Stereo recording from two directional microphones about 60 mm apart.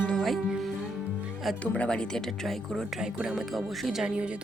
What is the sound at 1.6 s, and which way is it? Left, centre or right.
Speech, centre.